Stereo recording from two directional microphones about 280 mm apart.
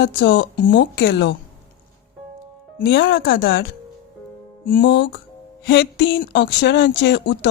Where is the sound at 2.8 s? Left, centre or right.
Left.